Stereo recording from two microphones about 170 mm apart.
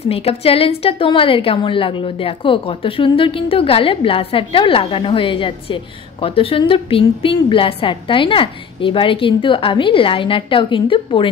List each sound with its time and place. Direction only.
0.1 s a woman's voice: 35° left (ahead or behind)